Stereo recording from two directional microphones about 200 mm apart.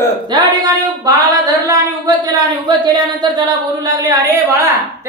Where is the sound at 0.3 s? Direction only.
20° right (ahead or behind).